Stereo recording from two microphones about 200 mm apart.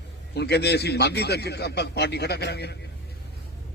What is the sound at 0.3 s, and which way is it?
A man's voice, 55° left (ahead or behind).